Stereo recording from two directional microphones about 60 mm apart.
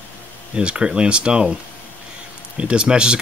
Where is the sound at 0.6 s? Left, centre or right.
Centre.